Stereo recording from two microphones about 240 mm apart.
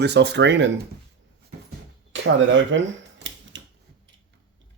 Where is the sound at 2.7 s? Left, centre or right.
Right.